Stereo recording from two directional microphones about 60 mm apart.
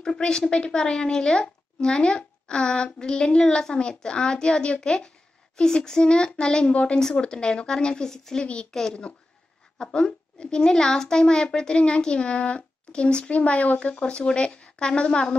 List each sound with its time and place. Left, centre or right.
0.0 s a child's voice: centre